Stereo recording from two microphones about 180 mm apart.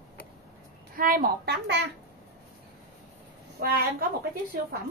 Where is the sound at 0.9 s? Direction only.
55° right (ahead or behind).